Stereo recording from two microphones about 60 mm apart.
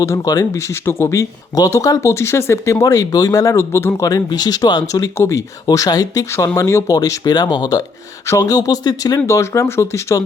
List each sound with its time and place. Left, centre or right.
0.0 s speech: left
0.6 s speech: left
2.0 s speech: left
2.8 s speech: left
3.6 s speech: left
4.0 s speech: left
5.1 s speech: left
6.6 s speech: left
6.9 s speech: left
9.2 s speech: left